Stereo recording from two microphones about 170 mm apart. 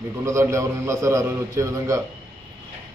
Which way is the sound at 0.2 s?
15° right (ahead or behind).